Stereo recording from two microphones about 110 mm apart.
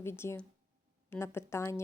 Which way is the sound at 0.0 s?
20° left (ahead or behind).